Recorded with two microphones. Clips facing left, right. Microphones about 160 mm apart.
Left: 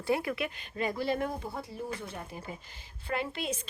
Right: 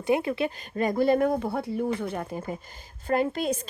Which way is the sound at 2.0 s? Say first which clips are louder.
Right 10 dB; 50° right (ahead or behind).